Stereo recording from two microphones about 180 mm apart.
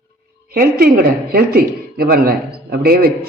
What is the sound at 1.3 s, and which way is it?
A man's voice, 60° right (ahead or behind).